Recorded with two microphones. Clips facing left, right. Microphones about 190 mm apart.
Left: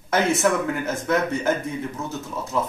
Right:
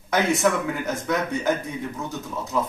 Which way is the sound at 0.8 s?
5° left (ahead or behind).